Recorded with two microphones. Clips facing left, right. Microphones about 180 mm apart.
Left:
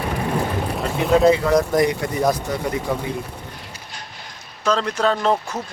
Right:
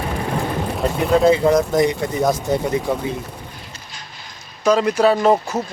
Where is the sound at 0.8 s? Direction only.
Centre (ahead or behind).